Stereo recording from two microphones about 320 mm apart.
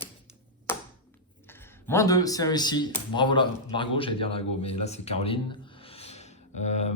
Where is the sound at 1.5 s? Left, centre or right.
Centre.